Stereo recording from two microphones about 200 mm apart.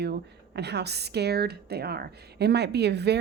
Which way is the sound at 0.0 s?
55° right (ahead or behind).